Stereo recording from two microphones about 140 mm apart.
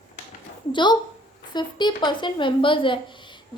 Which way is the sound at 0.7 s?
35° left (ahead or behind).